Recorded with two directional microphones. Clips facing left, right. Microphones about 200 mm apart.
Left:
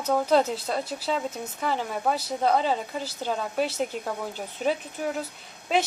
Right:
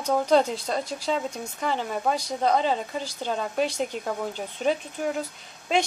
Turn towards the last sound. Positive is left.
turn(degrees=5)  # may be behind; listen again after turning